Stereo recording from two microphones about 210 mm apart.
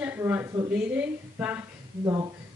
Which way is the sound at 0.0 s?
10° right (ahead or behind).